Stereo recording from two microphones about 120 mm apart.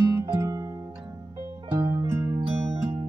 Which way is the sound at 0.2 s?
25° right (ahead or behind).